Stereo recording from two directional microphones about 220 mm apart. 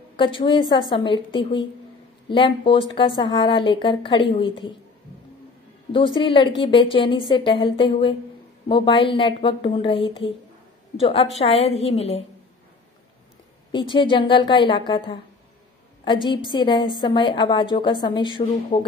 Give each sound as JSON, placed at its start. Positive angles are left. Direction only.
{"t": 0.1, "sound": "speech", "side_deg": 20}
{"t": 5.9, "sound": "speech", "side_deg": 20}
{"t": 13.7, "sound": "speech", "side_deg": 20}